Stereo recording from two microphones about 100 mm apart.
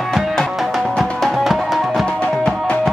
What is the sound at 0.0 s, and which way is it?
Music, centre (ahead or behind).